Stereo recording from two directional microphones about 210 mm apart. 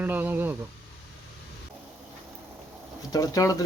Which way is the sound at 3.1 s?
15° left (ahead or behind).